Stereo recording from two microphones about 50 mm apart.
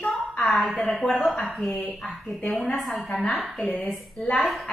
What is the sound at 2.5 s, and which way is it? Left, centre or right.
A woman's voice, centre.